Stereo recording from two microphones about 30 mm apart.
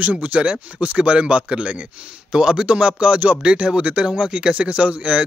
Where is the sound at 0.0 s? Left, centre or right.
Right.